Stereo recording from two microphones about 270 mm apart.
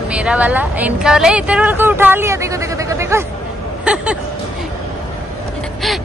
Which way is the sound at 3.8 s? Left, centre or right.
Centre.